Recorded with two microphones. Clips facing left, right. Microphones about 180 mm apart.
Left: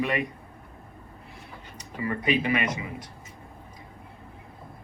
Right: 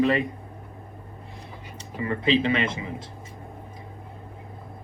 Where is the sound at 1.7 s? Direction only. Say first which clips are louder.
Right 2 dB; 25° right (ahead or behind).